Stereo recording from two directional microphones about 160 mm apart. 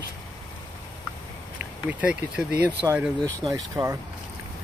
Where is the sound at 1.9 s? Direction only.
10° right (ahead or behind).